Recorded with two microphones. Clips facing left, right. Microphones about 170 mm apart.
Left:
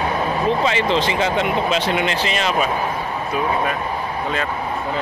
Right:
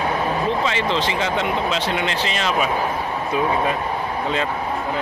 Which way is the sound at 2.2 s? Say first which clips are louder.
Left 2 dB; 5° left (ahead or behind).